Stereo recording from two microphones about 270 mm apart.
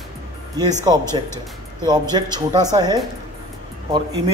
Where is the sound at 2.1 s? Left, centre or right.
Centre.